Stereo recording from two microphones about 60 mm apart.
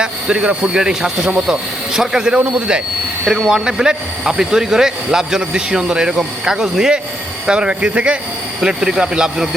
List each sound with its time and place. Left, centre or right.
0.0 s speech: centre